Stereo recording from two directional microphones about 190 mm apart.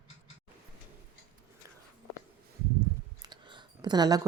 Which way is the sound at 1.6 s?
15° right (ahead or behind).